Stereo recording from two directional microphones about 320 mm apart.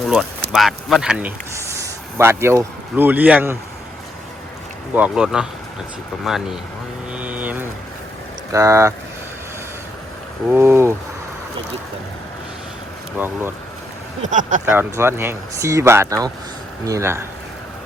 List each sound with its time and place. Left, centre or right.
0.5 s speech: centre
4.9 s speech: centre
7.1 s vehicle: centre
8.5 s speech: centre
10.5 s speech: centre
13.1 s speech: centre
14.2 s speech: right
14.7 s speech: centre